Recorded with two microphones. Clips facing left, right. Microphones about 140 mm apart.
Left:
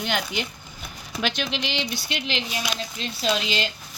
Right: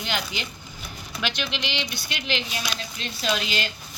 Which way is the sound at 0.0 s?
55° left (ahead or behind).